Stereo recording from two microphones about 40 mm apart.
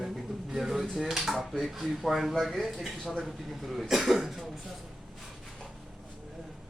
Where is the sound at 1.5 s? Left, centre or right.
Centre.